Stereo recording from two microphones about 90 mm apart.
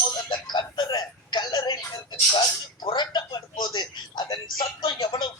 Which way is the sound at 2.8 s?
60° left (ahead or behind).